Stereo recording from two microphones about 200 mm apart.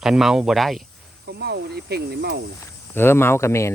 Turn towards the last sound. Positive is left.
turn(degrees=15)  # may be behind; listen again after turning